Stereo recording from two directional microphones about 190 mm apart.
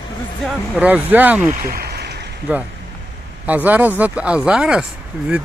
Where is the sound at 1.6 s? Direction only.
50° right (ahead or behind).